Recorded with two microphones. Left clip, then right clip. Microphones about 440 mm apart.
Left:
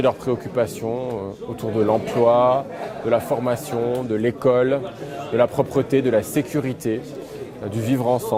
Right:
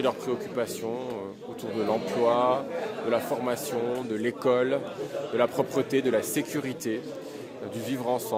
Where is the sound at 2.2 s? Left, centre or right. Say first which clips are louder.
Left 8 dB; left.